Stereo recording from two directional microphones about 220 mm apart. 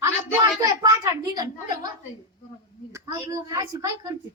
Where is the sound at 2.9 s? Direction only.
15° right (ahead or behind).